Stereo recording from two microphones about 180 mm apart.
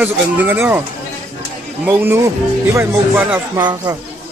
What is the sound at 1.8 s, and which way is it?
Speech, 10° right (ahead or behind).